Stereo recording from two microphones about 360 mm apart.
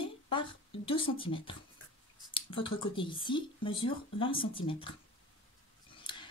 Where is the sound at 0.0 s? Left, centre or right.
Centre.